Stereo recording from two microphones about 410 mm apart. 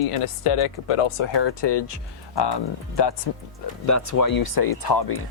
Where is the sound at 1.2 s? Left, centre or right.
Left.